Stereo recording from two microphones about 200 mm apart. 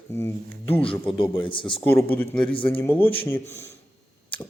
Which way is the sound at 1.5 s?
25° left (ahead or behind).